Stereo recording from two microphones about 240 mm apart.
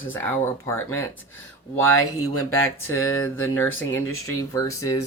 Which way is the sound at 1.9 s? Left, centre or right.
Left.